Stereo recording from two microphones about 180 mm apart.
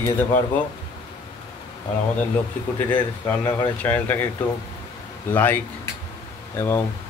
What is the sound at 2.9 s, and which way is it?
Speech, 10° left (ahead or behind).